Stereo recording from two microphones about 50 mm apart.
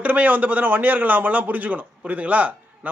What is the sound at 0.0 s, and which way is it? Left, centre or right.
A man's voice, right.